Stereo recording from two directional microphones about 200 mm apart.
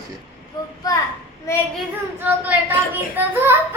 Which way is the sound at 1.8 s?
10° right (ahead or behind).